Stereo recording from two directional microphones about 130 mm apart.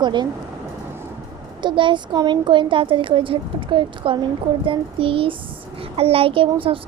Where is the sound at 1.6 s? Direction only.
40° right (ahead or behind).